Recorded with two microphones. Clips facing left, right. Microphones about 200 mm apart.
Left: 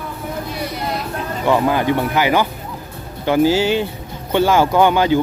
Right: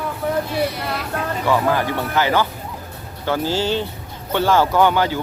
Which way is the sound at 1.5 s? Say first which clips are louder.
Left 4 dB; 20° left (ahead or behind).